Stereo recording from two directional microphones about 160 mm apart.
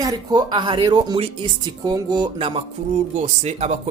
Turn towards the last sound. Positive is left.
turn(degrees=-45)  # may be behind; listen again after turning